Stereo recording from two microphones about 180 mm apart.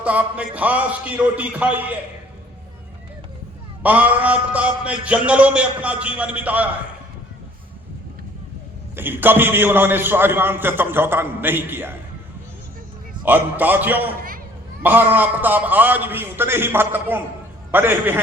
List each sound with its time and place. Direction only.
0.0 s a man's voice: 5° right (ahead or behind)
3.8 s a man's voice: 10° right (ahead or behind)
9.0 s a man's voice: 10° right (ahead or behind)
13.2 s a man's voice: 10° right (ahead or behind)
14.2 s a sound: 50° right (ahead or behind)
14.8 s a man's voice: 10° right (ahead or behind)